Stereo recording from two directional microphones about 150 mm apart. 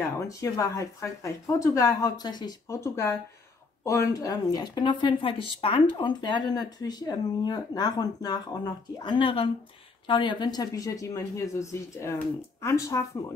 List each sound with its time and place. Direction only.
0.3 s speech: 20° left (ahead or behind)